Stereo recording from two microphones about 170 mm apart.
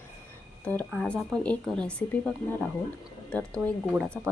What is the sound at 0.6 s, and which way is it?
A woman's voice, 10° left (ahead or behind).